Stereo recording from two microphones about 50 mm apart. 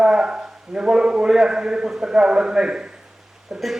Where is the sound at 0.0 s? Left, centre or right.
Centre.